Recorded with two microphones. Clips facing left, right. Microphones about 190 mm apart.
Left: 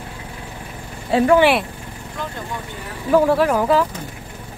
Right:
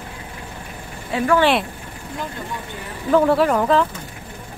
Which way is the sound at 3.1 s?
5° left (ahead or behind).